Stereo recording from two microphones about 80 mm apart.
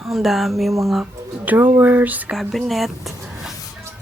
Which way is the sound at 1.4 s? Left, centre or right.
Right.